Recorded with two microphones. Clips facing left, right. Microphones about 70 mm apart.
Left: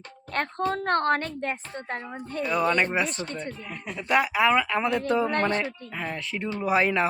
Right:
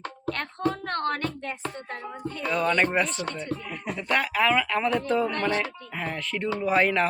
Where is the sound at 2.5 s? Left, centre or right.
Centre.